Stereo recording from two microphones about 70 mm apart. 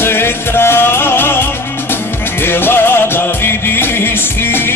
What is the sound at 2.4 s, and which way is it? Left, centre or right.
Music, left.